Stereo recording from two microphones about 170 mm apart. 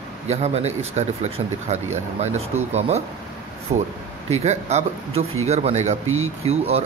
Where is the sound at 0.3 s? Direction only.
40° right (ahead or behind).